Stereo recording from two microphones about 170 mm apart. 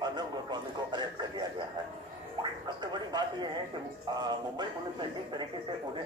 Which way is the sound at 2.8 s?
25° right (ahead or behind).